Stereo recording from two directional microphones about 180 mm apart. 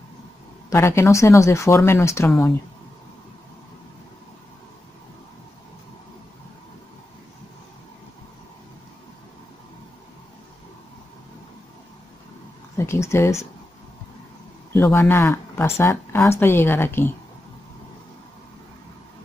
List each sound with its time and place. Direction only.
0.7 s speech: 15° left (ahead or behind)
12.7 s speech: 15° left (ahead or behind)
14.7 s speech: 15° left (ahead or behind)